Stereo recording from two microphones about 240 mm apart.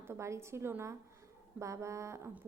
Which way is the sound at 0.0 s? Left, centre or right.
Centre.